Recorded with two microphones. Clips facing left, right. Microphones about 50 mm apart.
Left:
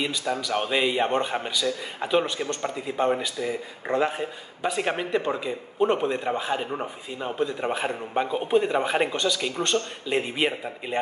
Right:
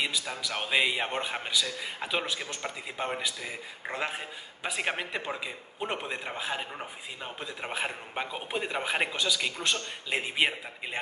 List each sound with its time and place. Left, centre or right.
0.0 s a man's voice: centre
6.7 s speech: centre
7.3 s a man's voice: centre